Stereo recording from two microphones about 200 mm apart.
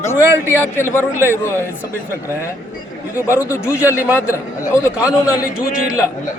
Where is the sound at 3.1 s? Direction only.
15° left (ahead or behind).